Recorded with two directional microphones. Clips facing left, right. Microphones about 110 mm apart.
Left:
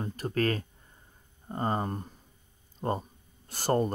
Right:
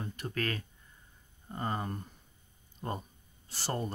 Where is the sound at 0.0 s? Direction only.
40° left (ahead or behind).